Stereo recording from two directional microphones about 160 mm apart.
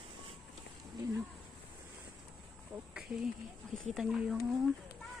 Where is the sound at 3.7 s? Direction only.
Centre (ahead or behind).